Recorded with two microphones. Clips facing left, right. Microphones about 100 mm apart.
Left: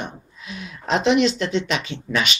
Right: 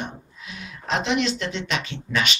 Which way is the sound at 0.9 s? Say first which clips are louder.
Left 5 dB; 20° left (ahead or behind).